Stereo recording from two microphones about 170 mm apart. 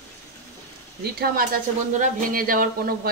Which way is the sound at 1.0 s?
65° right (ahead or behind).